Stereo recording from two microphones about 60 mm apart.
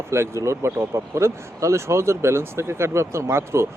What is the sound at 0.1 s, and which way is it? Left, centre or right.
Speech, right.